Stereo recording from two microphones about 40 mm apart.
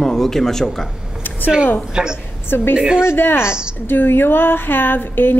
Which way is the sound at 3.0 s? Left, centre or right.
Left.